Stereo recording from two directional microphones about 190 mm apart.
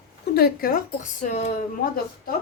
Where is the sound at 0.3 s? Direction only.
50° left (ahead or behind).